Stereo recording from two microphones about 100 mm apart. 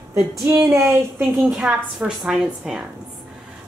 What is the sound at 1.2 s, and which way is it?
A woman's voice, 5° right (ahead or behind).